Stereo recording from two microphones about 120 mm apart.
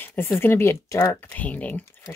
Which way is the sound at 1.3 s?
10° left (ahead or behind).